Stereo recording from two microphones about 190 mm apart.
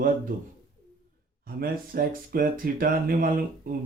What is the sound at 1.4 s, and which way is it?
Speech, 50° right (ahead or behind).